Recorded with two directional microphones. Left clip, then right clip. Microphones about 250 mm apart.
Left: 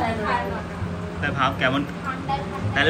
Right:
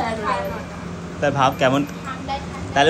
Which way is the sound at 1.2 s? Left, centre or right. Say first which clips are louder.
Right 5 dB; centre.